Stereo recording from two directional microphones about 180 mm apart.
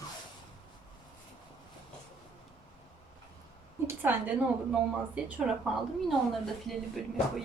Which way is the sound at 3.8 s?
10° right (ahead or behind).